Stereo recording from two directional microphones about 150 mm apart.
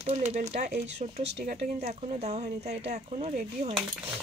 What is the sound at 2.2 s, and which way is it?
Speech, 50° right (ahead or behind).